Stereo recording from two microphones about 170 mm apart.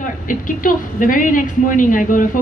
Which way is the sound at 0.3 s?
50° left (ahead or behind).